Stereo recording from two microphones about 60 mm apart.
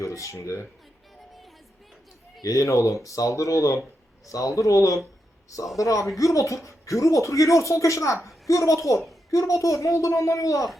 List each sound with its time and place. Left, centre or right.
0.0 s speech: left
2.4 s speech: left